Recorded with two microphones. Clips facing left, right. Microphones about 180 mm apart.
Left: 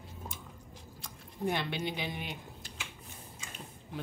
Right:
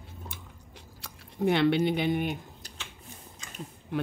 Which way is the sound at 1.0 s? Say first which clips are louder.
Right 7 dB; 70° right (ahead or behind).